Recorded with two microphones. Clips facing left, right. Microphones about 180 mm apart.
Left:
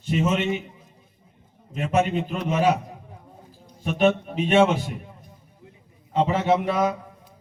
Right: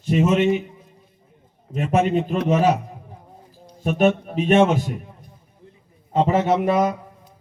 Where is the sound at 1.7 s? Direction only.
40° right (ahead or behind).